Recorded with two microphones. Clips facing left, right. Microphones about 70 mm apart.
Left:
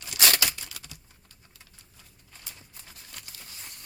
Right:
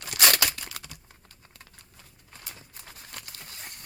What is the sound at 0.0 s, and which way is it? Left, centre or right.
Crumpling, right.